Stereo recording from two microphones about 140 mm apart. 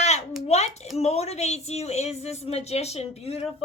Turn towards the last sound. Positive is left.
turn(degrees=50)  # may be behind; listen again after turning